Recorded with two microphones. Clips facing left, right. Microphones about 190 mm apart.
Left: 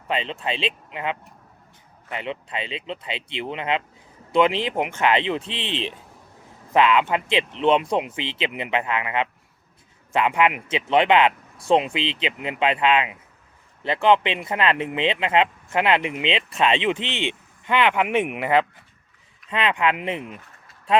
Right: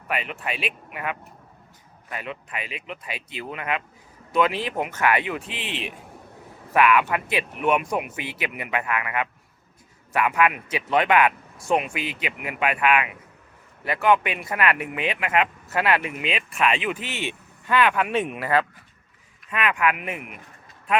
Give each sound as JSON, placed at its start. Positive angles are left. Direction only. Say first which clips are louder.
{"t": 0.1, "sound": "speech", "louder": "left 3 dB", "side_deg": 25}